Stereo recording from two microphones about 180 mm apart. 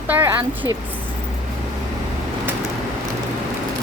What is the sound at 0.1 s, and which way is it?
Speech, 10° right (ahead or behind).